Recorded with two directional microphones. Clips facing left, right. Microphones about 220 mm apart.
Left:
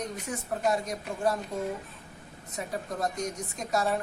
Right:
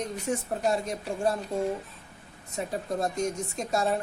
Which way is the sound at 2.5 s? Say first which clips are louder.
Right 4 dB; 25° right (ahead or behind).